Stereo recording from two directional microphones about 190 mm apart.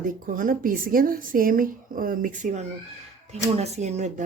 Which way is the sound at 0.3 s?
45° right (ahead or behind).